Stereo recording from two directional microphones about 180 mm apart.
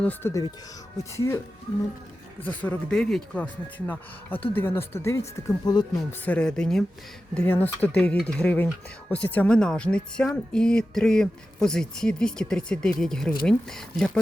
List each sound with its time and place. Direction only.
0.0 s speech: 10° left (ahead or behind)
2.4 s speech: 10° left (ahead or behind)